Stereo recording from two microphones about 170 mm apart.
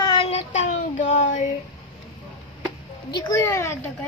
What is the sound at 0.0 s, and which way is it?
Child singing, 30° left (ahead or behind).